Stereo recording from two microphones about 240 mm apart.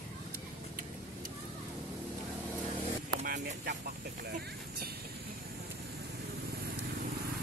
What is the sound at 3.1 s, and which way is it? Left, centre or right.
Vehicle, right.